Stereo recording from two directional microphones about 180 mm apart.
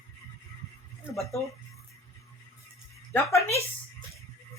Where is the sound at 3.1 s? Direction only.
15° left (ahead or behind).